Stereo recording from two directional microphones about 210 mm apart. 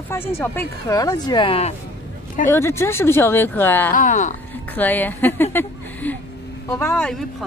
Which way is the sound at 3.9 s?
35° left (ahead or behind).